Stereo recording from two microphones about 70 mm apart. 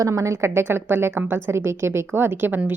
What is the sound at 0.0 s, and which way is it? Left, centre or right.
A woman's voice, right.